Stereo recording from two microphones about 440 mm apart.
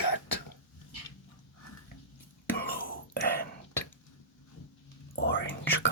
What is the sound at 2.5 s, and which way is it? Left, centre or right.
Whispering, centre.